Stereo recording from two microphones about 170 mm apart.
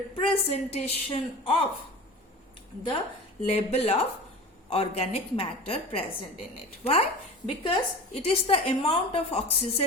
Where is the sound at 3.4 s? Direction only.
35° left (ahead or behind).